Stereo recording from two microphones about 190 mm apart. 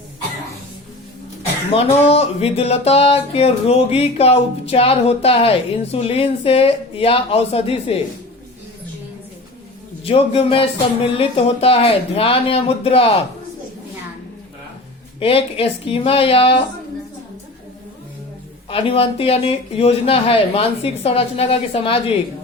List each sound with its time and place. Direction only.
1.7 s music: 30° left (ahead or behind)
10.0 s speech: 30° left (ahead or behind)
11.2 s music: 30° left (ahead or behind)
15.2 s speech: 30° left (ahead or behind)
18.7 s music: 30° left (ahead or behind)